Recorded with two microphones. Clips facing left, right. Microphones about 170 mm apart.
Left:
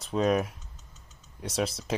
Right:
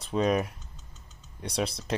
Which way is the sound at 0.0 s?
Centre (ahead or behind).